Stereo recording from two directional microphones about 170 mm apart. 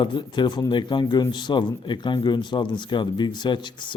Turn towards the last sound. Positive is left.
turn(degrees=25)  # may be behind; listen again after turning